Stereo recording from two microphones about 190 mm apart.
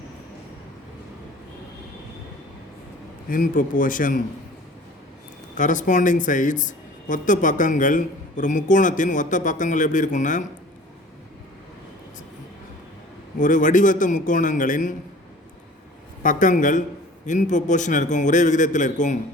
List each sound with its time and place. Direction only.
3.2 s a woman's voice: 45° left (ahead or behind)
5.5 s a woman's voice: 40° left (ahead or behind)
13.4 s a woman's voice: 45° left (ahead or behind)
16.2 s a woman's voice: 45° left (ahead or behind)